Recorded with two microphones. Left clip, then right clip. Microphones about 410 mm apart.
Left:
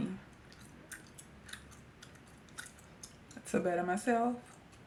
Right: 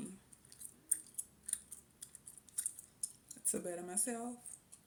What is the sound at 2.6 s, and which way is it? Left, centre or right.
Scissors, right.